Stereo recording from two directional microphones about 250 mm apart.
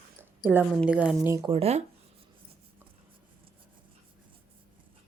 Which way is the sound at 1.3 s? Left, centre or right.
Centre.